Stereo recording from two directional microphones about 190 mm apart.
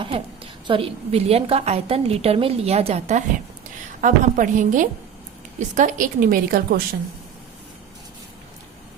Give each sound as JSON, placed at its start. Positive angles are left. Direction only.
{"t": 0.1, "sound": "a woman's voice", "side_deg": -30}